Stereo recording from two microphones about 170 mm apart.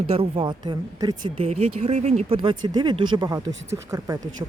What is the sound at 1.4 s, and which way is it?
Speech, 35° right (ahead or behind).